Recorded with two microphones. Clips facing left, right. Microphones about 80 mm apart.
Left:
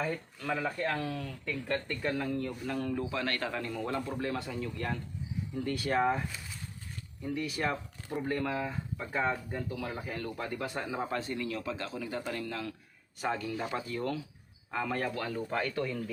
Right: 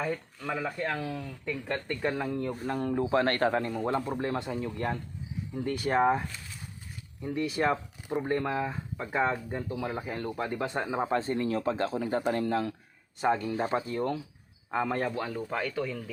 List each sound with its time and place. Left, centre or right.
0.0 s speech: centre
2.5 s speech: right; by 15.5 s centre
15.5 s speech: centre